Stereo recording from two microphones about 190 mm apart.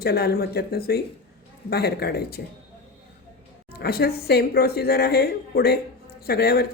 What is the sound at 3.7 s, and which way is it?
Speech, 55° left (ahead or behind).